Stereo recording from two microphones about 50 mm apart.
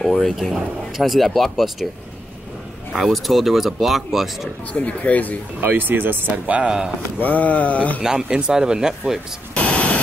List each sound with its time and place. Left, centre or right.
0.0 s speech: centre
3.1 s speech: centre
4.7 s speech: left
5.6 s speech: right
7.2 s a sound: left
8.0 s speech: centre
9.6 s static: left